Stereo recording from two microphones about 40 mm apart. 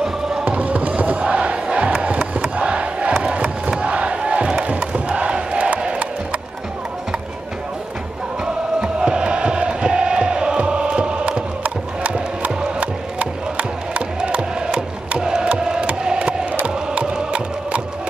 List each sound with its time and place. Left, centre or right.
0.5 s fireworks: right
1.2 s crowd: right
9.0 s chant: right
12.8 s music: right
16.6 s chant: right